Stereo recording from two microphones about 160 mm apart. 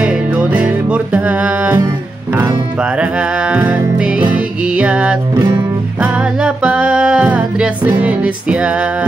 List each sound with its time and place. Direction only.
0.0 s music: 10° right (ahead or behind)
5.3 s music: 25° right (ahead or behind)
6.1 s music: 5° right (ahead or behind)